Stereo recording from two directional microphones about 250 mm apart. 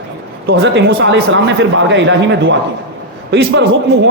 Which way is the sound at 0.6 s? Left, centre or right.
Right.